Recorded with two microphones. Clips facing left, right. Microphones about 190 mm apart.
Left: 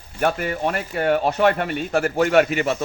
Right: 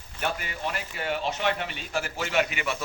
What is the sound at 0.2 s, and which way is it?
Speech, 50° left (ahead or behind).